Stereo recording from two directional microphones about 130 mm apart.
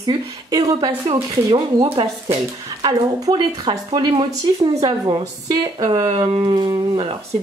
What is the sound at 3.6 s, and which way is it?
Speech, 45° right (ahead or behind).